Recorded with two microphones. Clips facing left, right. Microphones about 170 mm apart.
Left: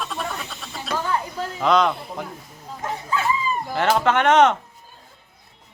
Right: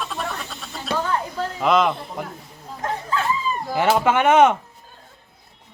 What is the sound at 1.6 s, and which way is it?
Speech, 5° right (ahead or behind).